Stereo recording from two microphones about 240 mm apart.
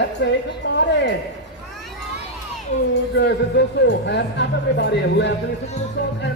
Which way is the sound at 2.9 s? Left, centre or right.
Left.